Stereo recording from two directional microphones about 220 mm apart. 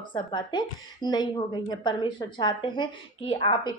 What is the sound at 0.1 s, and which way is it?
Speech, 20° left (ahead or behind).